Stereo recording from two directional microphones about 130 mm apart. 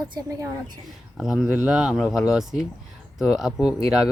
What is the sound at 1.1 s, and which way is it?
Speech, 5° right (ahead or behind).